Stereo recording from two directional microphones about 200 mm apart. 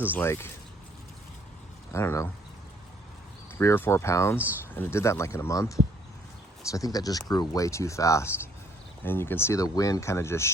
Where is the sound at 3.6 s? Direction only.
10° left (ahead or behind).